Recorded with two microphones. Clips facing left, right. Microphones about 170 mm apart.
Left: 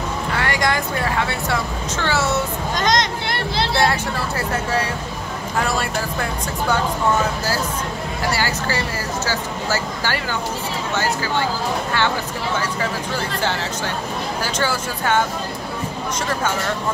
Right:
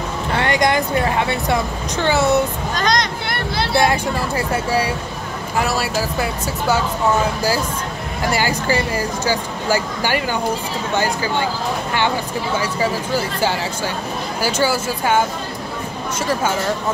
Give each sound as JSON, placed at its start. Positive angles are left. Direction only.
{"t": 0.4, "sound": "speech", "side_deg": -20}
{"t": 2.7, "sound": "speech", "side_deg": 20}
{"t": 3.7, "sound": "speech", "side_deg": -15}
{"t": 8.3, "sound": "speech", "side_deg": -15}
{"t": 14.4, "sound": "speech", "side_deg": -10}